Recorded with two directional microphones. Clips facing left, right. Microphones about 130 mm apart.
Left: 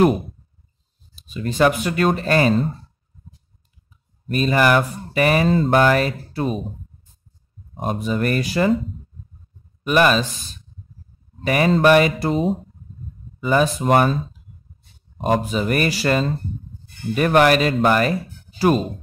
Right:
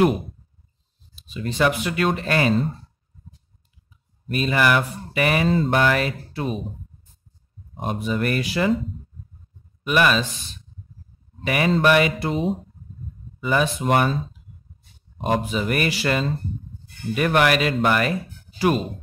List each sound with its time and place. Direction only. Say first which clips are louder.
1.1 s speech: left 3 dB; 45° left (ahead or behind)
4.3 s speech: left 3 dB; 40° left (ahead or behind)
7.7 s speech: left 2 dB; 40° left (ahead or behind)
9.8 s speech: left 3 dB; 40° left (ahead or behind)
11.4 s speech: left 3 dB; 40° left (ahead or behind)
15.1 s speech: left 3 dB; 40° left (ahead or behind)